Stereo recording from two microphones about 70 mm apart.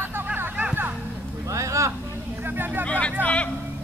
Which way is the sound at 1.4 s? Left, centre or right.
Right.